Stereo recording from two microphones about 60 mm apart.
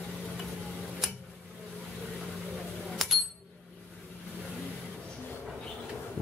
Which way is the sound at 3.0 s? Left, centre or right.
Centre.